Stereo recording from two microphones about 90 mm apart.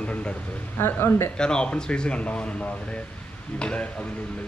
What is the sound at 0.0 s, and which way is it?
Speech, 15° left (ahead or behind).